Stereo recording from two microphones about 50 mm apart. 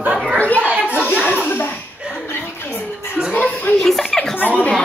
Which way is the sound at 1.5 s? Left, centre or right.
Left.